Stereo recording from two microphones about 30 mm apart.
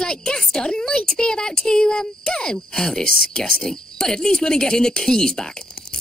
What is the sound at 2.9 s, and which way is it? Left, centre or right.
Speech, left.